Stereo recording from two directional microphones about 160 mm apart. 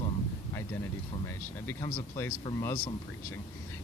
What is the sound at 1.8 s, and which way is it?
Speech, 15° left (ahead or behind).